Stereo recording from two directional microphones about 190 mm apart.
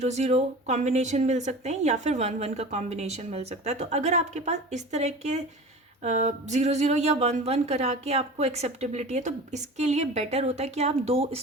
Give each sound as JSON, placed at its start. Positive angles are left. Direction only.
{"t": 0.0, "sound": "speech", "side_deg": -35}